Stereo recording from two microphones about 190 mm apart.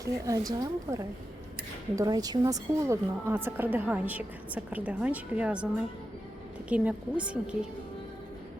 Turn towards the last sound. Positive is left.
turn(degrees=-5)  # may be behind; listen again after turning